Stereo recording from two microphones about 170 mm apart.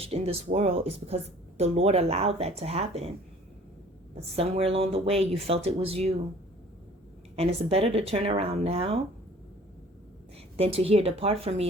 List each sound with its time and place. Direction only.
0.0 s speech: 35° right (ahead or behind)
4.1 s speech: 35° right (ahead or behind)
7.3 s speech: 35° right (ahead or behind)
10.6 s speech: 35° right (ahead or behind)